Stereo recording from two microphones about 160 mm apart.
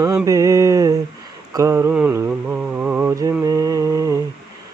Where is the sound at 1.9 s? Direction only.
10° right (ahead or behind).